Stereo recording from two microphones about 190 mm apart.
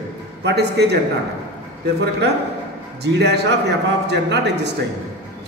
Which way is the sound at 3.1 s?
60° right (ahead or behind).